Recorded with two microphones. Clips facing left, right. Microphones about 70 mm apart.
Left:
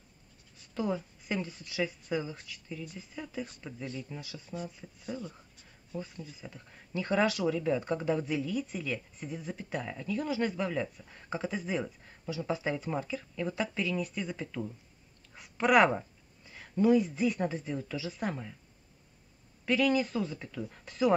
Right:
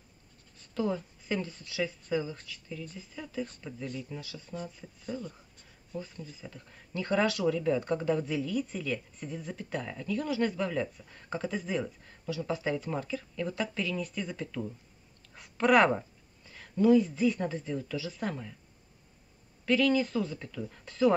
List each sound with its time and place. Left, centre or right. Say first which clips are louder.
0.6 s speech: right 1 dB; centre
15.3 s a sound: right 1 dB; centre
16.4 s speech: right 2 dB; centre
19.6 s speech: right 1 dB; centre